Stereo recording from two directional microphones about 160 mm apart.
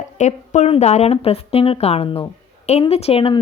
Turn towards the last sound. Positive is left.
turn(degrees=35)  # may be behind; listen again after turning